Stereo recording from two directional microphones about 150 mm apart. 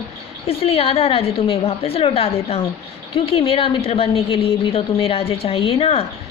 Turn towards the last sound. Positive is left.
turn(degrees=40)  # may be behind; listen again after turning